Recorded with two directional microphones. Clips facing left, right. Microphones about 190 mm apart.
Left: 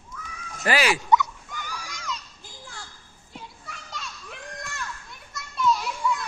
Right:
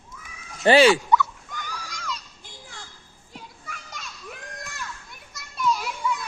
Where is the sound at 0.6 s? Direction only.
30° right (ahead or behind).